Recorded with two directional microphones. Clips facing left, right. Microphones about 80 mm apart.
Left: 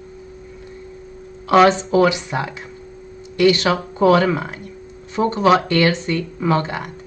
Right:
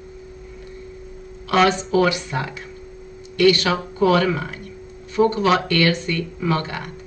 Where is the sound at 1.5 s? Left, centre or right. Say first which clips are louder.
Left 4 dB; left.